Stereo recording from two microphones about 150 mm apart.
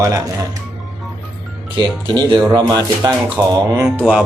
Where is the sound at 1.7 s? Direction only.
30° right (ahead or behind).